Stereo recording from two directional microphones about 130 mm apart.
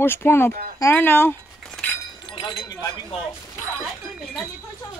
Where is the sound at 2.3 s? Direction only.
40° left (ahead or behind).